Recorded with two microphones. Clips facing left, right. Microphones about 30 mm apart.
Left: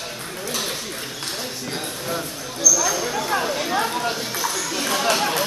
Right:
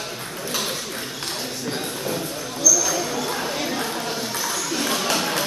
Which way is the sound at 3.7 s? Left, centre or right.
Centre.